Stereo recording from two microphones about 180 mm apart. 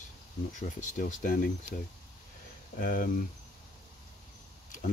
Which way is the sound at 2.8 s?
50° left (ahead or behind).